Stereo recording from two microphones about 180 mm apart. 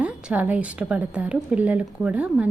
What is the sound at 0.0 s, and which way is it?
A woman's voice, 5° right (ahead or behind).